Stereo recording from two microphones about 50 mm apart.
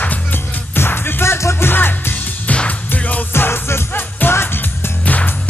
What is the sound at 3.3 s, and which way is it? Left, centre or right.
Music, left.